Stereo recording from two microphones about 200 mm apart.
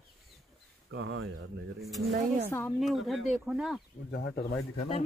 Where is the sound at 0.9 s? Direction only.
85° right.